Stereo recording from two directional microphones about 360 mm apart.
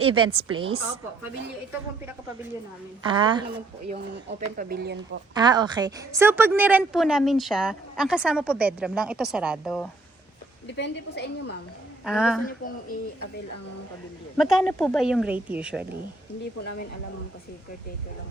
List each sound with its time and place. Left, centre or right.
0.0 s speech: centre
3.0 s speech: centre
5.3 s a woman's voice: centre
10.7 s a woman's voice: left
12.0 s a woman's voice: centre
14.3 s a woman's voice: centre